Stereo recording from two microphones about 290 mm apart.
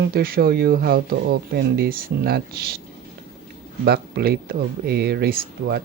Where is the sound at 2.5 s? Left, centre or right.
Right.